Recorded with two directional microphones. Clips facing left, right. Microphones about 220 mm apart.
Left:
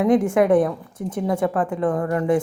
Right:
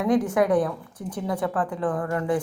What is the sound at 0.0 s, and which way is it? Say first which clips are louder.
A woman's voice: left 4 dB; 25° left (ahead or behind).